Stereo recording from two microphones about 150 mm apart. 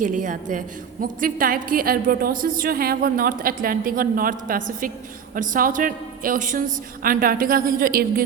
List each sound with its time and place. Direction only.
0.0 s a woman's voice: 55° right (ahead or behind)
1.0 s a woman's voice: 70° right (ahead or behind)